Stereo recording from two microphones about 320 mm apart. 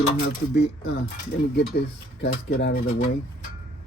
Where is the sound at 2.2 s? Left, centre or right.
Left.